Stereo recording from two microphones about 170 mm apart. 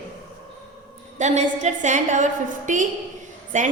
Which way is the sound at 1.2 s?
45° right (ahead or behind).